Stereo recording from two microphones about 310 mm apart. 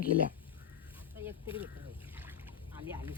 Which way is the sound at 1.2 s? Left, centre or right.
Centre.